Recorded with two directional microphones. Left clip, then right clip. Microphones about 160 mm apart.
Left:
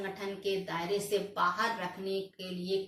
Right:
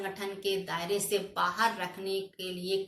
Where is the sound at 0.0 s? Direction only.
25° right (ahead or behind).